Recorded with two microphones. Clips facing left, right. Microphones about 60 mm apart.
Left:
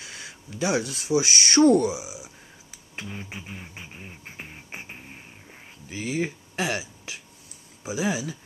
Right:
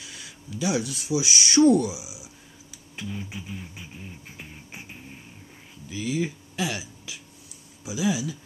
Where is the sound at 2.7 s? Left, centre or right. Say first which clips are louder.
Right 2 dB; left.